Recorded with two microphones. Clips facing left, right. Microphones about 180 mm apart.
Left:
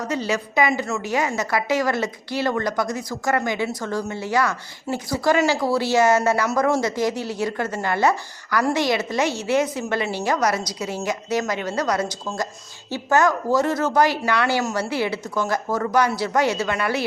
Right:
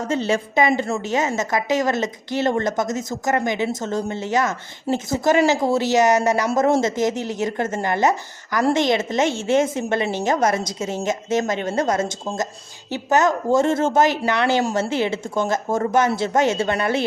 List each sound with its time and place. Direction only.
0.0 s speech: 25° right (ahead or behind)